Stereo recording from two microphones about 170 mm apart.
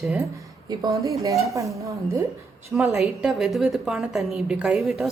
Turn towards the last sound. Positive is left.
turn(degrees=0)  # may be behind; listen again after turning